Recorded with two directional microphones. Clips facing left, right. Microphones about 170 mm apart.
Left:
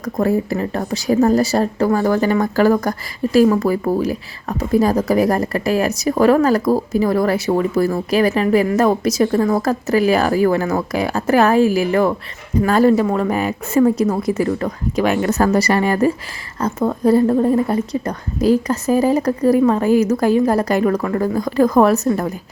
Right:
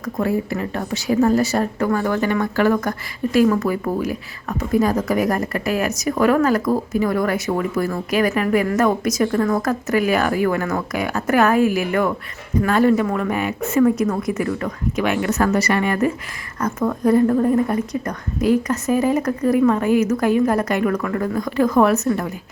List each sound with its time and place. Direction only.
0.0 s speech: 35° left (ahead or behind)